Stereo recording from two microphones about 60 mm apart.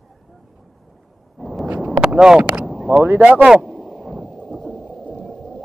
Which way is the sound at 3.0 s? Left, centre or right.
Right.